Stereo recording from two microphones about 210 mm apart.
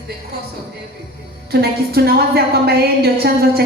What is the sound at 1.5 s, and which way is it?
A woman's voice, 50° right (ahead or behind).